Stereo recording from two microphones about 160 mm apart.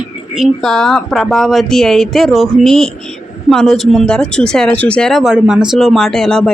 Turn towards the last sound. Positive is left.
turn(degrees=5)  # may be behind; listen again after turning